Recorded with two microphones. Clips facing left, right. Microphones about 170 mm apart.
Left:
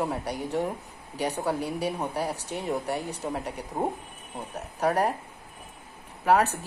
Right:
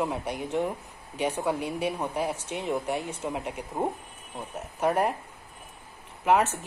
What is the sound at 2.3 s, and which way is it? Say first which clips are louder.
Speech: even; 35° left (ahead or behind).